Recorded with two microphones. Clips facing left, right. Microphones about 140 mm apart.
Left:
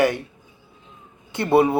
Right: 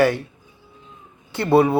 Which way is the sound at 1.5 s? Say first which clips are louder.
Right 1 dB; 20° left (ahead or behind).